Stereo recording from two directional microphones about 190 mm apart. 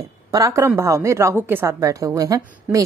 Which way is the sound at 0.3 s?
15° right (ahead or behind).